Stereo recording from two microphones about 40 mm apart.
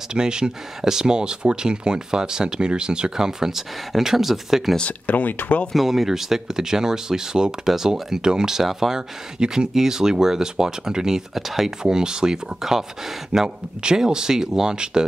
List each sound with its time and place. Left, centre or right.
0.1 s speech: centre
4.8 s speech: left
5.8 s speech: centre
11.8 s speech: centre